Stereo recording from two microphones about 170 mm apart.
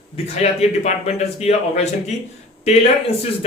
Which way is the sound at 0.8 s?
40° left (ahead or behind).